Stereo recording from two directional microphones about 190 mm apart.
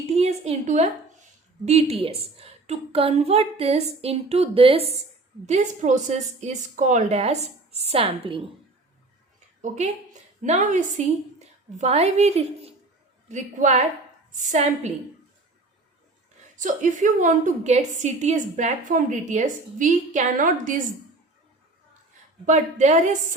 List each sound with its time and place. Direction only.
0.2 s a woman's voice: 35° right (ahead or behind)
9.6 s a woman's voice: 40° right (ahead or behind)
16.6 s a woman's voice: 40° right (ahead or behind)
22.4 s a woman's voice: 40° right (ahead or behind)